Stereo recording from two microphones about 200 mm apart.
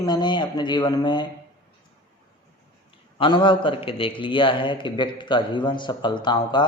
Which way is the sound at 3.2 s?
25° left (ahead or behind).